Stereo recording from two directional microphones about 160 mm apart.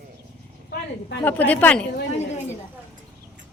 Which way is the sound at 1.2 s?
10° left (ahead or behind).